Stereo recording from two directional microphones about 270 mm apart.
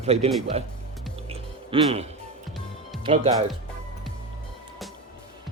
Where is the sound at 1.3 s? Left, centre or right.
Right.